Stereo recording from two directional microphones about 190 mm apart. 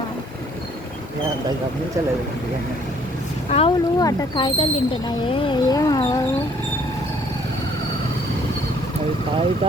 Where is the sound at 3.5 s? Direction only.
30° left (ahead or behind).